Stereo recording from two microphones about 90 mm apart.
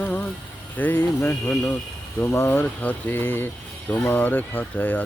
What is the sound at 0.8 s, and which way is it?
Speech, 25° left (ahead or behind).